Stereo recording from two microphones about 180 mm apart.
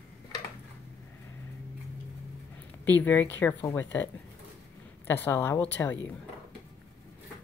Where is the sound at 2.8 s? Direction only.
10° left (ahead or behind).